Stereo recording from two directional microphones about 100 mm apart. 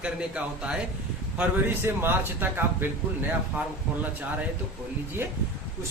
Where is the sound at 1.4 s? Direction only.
20° right (ahead or behind).